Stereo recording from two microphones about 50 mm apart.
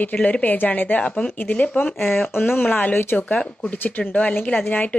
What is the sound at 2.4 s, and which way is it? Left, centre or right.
A woman's voice, left.